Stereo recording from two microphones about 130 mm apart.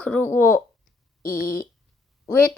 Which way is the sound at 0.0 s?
15° left (ahead or behind).